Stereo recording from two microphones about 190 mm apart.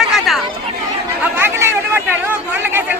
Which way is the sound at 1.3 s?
10° right (ahead or behind).